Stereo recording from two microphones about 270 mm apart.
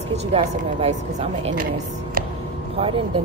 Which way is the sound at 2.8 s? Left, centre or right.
Centre.